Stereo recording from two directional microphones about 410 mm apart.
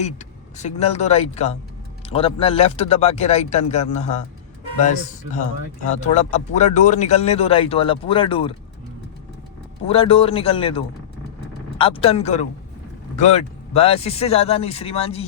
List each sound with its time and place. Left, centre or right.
0.5 s a man's voice: centre
9.8 s a man's voice: centre